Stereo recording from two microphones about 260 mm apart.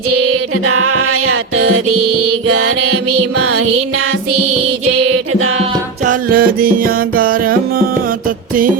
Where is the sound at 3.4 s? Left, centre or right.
Right.